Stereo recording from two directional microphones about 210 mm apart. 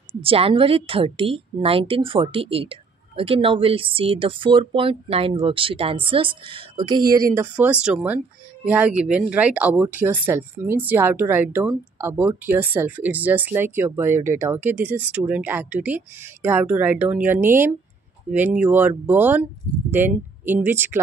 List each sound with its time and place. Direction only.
0.2 s a woman's voice: 25° right (ahead or behind)
7.3 s speech: 10° right (ahead or behind)